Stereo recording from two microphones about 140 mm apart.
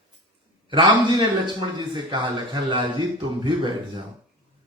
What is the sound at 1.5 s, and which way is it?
Speech, 35° right (ahead or behind).